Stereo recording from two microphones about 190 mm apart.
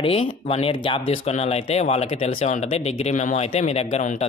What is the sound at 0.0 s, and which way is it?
Speech, 30° left (ahead or behind).